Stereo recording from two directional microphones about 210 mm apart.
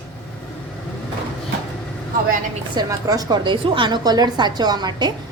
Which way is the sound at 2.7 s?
20° right (ahead or behind).